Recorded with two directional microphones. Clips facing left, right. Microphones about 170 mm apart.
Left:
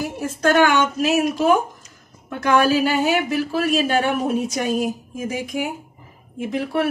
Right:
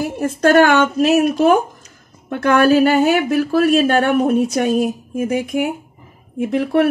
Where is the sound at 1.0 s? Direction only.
55° right (ahead or behind).